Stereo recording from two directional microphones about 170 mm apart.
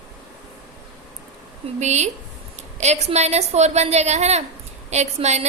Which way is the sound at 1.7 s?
40° right (ahead or behind).